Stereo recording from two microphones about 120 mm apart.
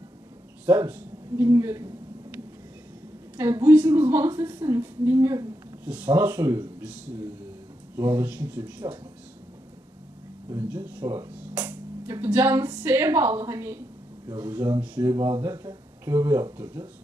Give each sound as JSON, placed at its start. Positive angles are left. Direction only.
{"t": 0.7, "sound": "speech", "side_deg": -15}
{"t": 3.3, "sound": "a woman's voice", "side_deg": -20}
{"t": 10.5, "sound": "a woman's voice", "side_deg": -15}